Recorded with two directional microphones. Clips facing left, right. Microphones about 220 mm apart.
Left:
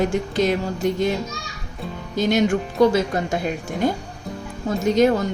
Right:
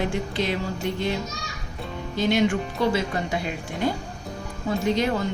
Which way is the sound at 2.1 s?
45° left (ahead or behind).